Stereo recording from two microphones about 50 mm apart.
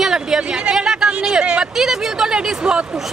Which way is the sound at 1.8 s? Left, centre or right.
Centre.